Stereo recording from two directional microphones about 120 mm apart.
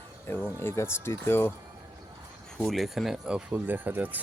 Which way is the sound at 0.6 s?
20° left (ahead or behind).